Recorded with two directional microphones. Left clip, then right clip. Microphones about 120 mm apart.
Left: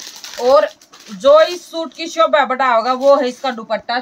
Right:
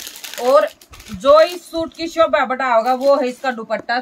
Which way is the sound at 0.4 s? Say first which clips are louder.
Left 2 dB; 15° left (ahead or behind).